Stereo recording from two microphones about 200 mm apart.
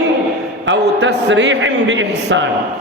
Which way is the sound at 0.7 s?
65° right (ahead or behind).